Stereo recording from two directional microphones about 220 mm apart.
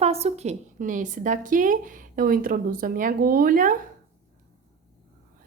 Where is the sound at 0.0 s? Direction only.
30° right (ahead or behind).